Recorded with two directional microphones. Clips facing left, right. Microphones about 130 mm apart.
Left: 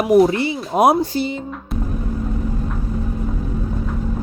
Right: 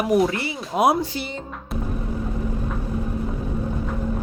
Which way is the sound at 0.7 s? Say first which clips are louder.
Left 4 dB; 45° left (ahead or behind).